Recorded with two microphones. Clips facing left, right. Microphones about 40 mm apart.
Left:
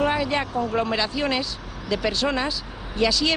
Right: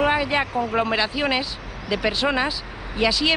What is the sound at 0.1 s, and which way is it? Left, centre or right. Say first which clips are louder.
Speech: right 2 dB; centre.